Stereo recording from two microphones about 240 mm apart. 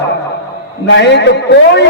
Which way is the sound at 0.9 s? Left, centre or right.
Left.